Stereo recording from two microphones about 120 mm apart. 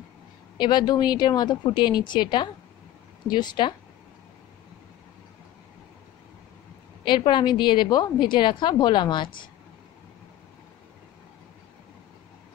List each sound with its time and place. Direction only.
0.6 s a woman's voice: 40° left (ahead or behind)
7.1 s a woman's voice: 40° left (ahead or behind)